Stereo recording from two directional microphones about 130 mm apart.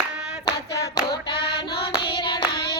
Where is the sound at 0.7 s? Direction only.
30° left (ahead or behind).